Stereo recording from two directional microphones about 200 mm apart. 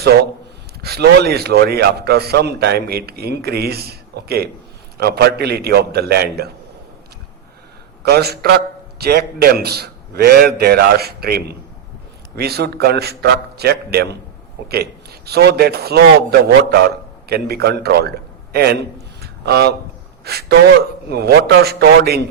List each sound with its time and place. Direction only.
0.8 s a man's voice: 50° right (ahead or behind)
8.0 s a man's voice: 55° right (ahead or behind)
19.2 s a sound: 55° right (ahead or behind)
20.2 s a man's voice: 55° right (ahead or behind)